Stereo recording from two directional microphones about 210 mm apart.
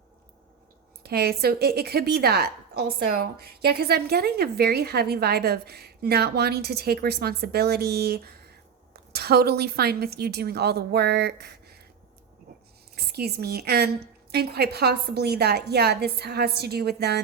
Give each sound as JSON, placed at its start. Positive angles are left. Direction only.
{"t": 1.0, "sound": "a woman's voice", "side_deg": -50}
{"t": 13.0, "sound": "a woman's voice", "side_deg": -50}